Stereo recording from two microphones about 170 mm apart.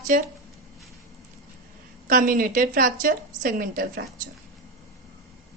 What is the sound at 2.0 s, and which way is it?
A woman's voice, 55° right (ahead or behind).